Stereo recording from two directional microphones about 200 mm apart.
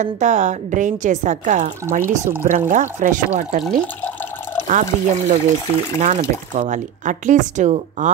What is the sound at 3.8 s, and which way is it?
Water, 10° left (ahead or behind).